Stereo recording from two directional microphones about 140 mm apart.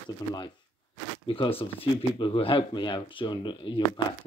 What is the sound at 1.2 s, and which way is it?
Speech, 40° left (ahead or behind).